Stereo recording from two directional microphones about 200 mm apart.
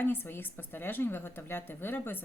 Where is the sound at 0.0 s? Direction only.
10° left (ahead or behind).